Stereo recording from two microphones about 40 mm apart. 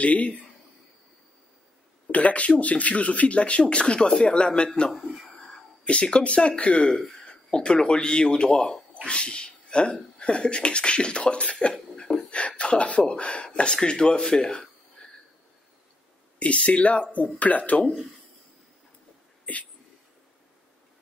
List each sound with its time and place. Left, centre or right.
0.0 s speech: left
2.0 s speech: left
4.9 s speech: centre
5.9 s speech: left
7.0 s speech: centre
11.7 s a sound: centre
12.3 s speech: left
15.0 s a sound: left
16.3 s speech: left